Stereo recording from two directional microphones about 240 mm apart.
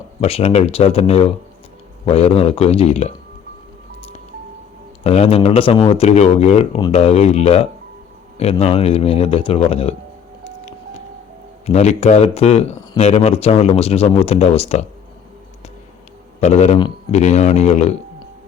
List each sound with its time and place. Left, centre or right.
0.2 s speech: left
5.0 s speech: left
11.6 s speech: left
16.4 s speech: left